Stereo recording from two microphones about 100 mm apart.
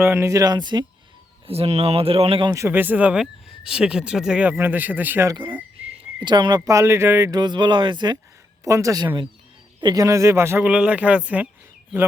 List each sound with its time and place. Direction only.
0.0 s speech: 25° right (ahead or behind); by 0.9 s 45° right (ahead or behind)
1.5 s speech: 90° right; by 2.4 s 75° right (ahead or behind)
2.5 s speech: 30° right (ahead or behind)
2.7 s speech: 20° right (ahead or behind)
4.5 s a man's voice: 20° right (ahead or behind)
6.1 s speech: 50° right (ahead or behind)
6.7 s a man's voice: 25° right (ahead or behind)
7.3 s speech: 45° right (ahead or behind)
8.6 s a man's voice: 30° right (ahead or behind)
10.6 s speech: 10° right (ahead or behind)